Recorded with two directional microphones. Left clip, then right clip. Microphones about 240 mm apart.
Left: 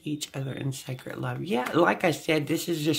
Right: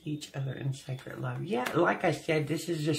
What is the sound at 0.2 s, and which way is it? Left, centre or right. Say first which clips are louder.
Speech: left 5 dB; left.